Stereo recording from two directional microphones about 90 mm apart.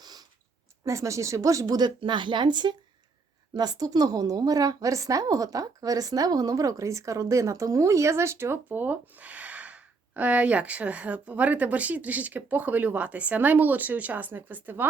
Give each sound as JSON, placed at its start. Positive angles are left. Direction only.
{"t": 0.0, "sound": "a sound", "side_deg": -50}
{"t": 0.9, "sound": "speech", "side_deg": -35}
{"t": 2.0, "sound": "a woman's voice", "side_deg": -60}